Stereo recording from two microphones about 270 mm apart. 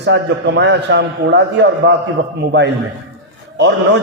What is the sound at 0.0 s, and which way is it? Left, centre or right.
A man's voice, right.